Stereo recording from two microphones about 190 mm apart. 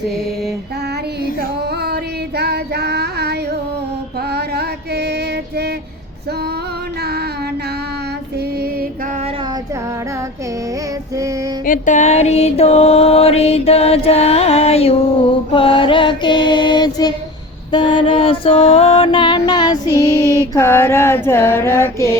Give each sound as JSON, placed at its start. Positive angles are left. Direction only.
{"t": 1.4, "sound": "female singing", "side_deg": -55}
{"t": 4.3, "sound": "music", "side_deg": -60}
{"t": 11.6, "sound": "music", "side_deg": 40}
{"t": 15.5, "sound": "female singing", "side_deg": 30}
{"t": 17.7, "sound": "music", "side_deg": 25}
{"t": 20.5, "sound": "a sound", "side_deg": 15}